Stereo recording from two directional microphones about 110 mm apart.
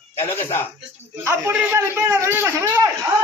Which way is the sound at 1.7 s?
25° right (ahead or behind).